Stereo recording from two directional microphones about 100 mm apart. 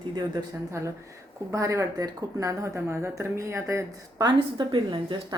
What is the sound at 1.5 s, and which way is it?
Speech, 30° right (ahead or behind).